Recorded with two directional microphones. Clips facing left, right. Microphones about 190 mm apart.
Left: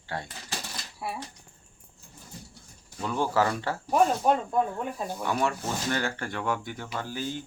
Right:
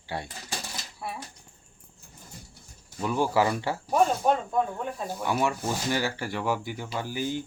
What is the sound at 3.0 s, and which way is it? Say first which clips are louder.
Speech: right 2 dB; 10° right (ahead or behind).